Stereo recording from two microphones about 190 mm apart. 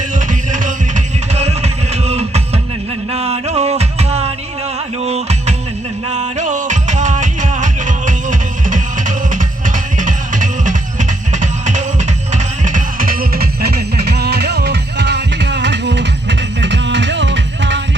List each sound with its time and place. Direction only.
0.3 s music: 40° right (ahead or behind); by 17.7 s 70° right (ahead or behind)